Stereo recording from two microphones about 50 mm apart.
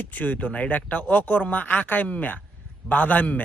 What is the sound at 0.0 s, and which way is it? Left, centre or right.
Speech, left.